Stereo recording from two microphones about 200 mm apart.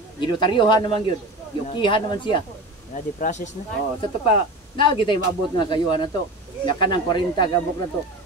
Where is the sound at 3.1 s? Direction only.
35° left (ahead or behind).